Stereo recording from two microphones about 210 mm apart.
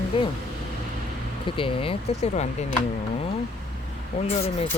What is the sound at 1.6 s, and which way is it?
Speech, 25° left (ahead or behind).